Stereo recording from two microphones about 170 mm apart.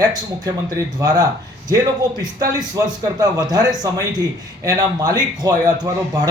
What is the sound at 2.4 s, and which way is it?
A man's voice, 20° right (ahead or behind).